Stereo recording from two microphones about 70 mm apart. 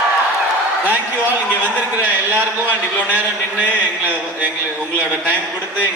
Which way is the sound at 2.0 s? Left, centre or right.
Right.